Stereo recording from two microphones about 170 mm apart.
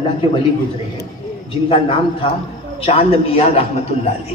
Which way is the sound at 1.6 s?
35° left (ahead or behind).